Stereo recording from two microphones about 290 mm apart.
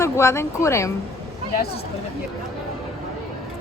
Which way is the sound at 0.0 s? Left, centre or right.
Centre.